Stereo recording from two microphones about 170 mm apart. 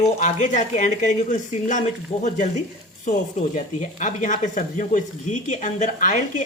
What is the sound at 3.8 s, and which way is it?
Speech, 45° left (ahead or behind).